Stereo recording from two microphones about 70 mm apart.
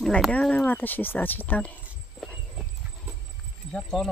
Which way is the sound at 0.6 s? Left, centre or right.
Left.